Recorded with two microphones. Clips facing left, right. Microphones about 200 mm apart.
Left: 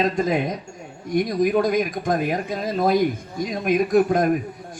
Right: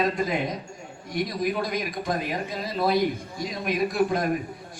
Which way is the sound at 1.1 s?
45° left (ahead or behind).